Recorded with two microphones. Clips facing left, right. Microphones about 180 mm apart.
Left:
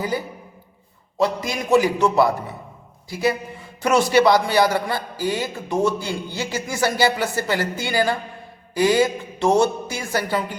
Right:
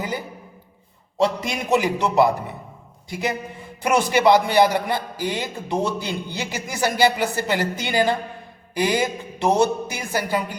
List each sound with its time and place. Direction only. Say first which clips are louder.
1.2 s a man's voice: even; 25° right (ahead or behind)